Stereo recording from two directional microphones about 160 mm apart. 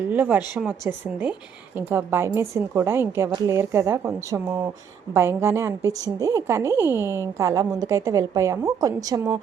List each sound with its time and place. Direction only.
0.1 s speech: 10° right (ahead or behind)